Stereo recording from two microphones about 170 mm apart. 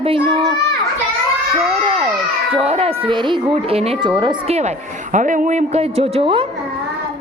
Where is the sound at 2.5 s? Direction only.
35° right (ahead or behind).